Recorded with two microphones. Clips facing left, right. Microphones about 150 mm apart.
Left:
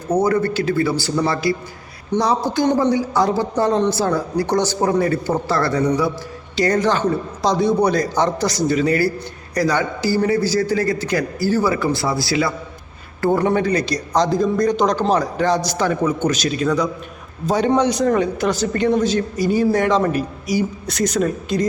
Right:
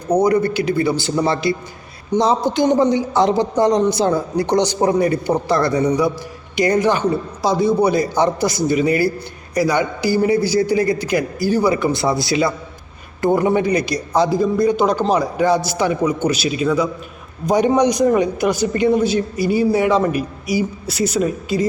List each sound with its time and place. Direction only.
0.1 s a man's voice: 15° right (ahead or behind)